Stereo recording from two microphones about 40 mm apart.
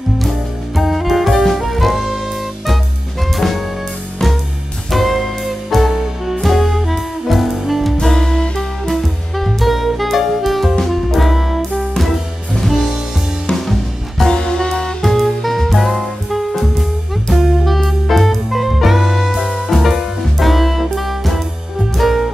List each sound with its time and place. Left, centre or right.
0.7 s music: centre
3.3 s jazz: centre
4.9 s music: centre
8.0 s music: centre
13.7 s music: centre
14.3 s music: centre
15.0 s music: centre